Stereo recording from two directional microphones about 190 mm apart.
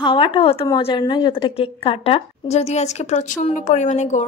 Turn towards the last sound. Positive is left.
turn(degrees=40)  # may be behind; listen again after turning